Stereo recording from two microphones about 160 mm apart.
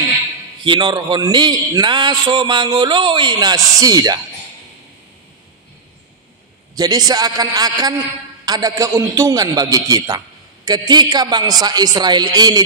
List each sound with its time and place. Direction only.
0.7 s a man's voice: 25° right (ahead or behind)
6.7 s a man's voice: 25° right (ahead or behind)